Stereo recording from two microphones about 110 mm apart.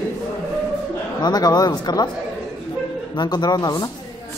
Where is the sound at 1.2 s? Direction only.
35° left (ahead or behind).